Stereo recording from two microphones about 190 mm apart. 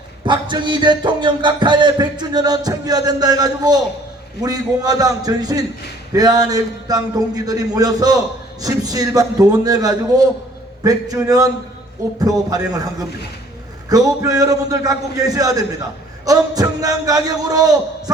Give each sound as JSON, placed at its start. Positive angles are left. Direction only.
{"t": 0.3, "sound": "music", "side_deg": -25}
{"t": 16.2, "sound": "a man's voice", "side_deg": -20}